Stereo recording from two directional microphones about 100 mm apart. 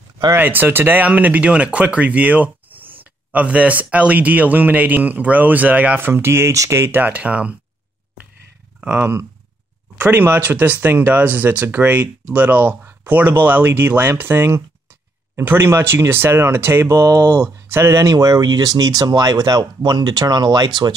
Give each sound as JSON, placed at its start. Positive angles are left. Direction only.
{"t": 0.4, "sound": "speech", "side_deg": -20}
{"t": 8.8, "sound": "speech", "side_deg": -20}